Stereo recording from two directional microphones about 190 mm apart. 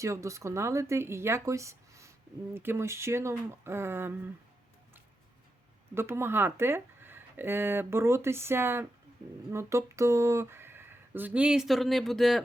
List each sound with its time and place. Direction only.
0.0 s speech: 15° right (ahead or behind)
5.9 s speech: 15° right (ahead or behind)